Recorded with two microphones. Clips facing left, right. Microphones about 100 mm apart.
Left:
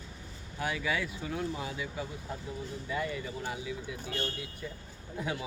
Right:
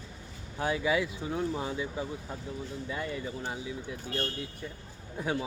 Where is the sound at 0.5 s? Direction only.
30° right (ahead or behind).